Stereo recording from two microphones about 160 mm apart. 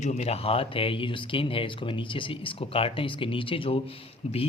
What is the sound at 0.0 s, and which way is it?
A man's voice, 45° left (ahead or behind).